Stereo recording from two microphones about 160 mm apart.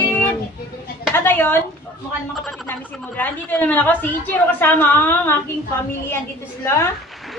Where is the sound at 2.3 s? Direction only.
5° left (ahead or behind).